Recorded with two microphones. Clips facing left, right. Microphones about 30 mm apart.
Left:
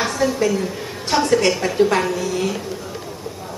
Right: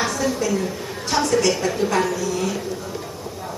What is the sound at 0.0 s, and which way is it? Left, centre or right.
A woman's voice, left.